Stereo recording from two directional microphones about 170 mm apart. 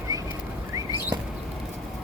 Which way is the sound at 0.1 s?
20° right (ahead or behind).